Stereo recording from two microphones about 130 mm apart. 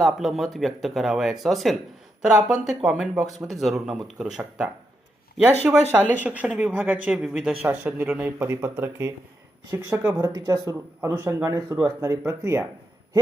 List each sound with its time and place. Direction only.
0.0 s speech: centre (ahead or behind)
10.2 s speech: 30° right (ahead or behind)
11.1 s speech: 15° right (ahead or behind)